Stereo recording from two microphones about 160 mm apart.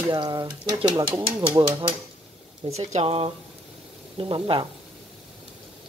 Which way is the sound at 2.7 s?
40° right (ahead or behind).